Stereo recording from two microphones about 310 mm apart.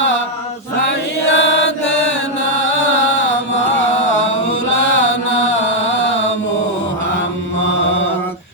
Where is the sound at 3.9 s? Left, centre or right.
Left.